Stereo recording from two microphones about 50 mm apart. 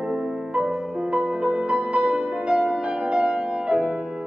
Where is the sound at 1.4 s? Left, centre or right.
Right.